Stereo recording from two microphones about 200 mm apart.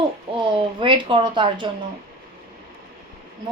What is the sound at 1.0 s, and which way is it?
Speech, 25° right (ahead or behind).